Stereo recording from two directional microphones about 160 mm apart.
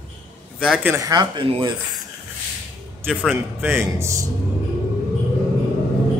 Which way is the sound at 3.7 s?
20° right (ahead or behind).